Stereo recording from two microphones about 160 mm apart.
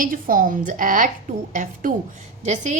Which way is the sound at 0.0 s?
60° right (ahead or behind).